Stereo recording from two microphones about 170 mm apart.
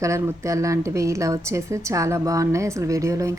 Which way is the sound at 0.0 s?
15° right (ahead or behind).